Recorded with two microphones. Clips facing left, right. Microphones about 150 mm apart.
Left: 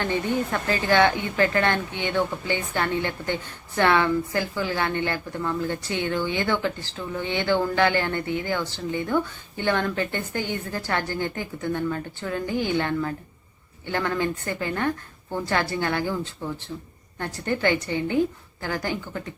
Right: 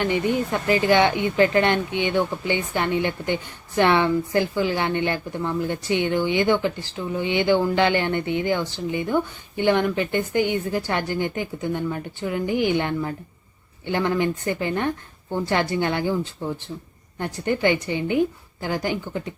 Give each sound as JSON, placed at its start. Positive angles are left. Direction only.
{"t": 0.0, "sound": "a woman's voice", "side_deg": -15}